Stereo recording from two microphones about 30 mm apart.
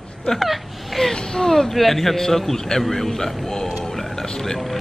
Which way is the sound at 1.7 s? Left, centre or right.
Centre.